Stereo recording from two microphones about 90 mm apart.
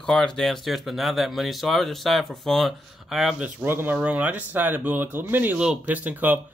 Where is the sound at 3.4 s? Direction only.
25° right (ahead or behind).